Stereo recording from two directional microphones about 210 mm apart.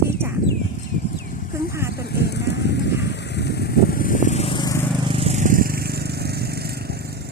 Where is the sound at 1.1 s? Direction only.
40° left (ahead or behind).